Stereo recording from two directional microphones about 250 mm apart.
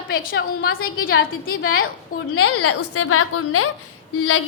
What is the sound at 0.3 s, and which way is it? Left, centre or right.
A woman's voice, left.